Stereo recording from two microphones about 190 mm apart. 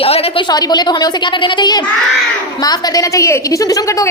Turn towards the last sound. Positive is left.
turn(degrees=15)  # may be behind; listen again after turning